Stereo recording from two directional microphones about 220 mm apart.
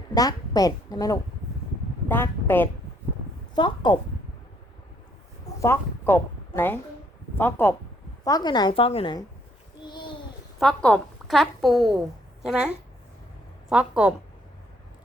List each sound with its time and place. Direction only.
0.1 s a woman's voice: 15° left (ahead or behind)
3.5 s speech: 20° left (ahead or behind)
5.5 s a woman's voice: 10° left (ahead or behind)
9.8 s a sound: 20° left (ahead or behind)
10.6 s a woman's voice: 5° left (ahead or behind)
13.7 s a woman's voice: 5° right (ahead or behind)